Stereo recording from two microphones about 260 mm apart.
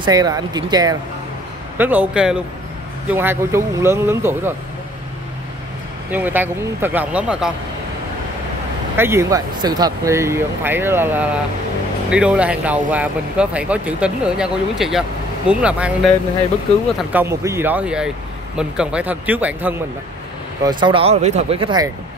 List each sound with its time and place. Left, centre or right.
0.0 s speech: centre
6.1 s speech: centre
8.9 s speech: centre
20.6 s speech: centre